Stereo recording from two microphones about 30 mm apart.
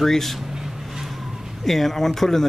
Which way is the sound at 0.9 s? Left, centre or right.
Centre.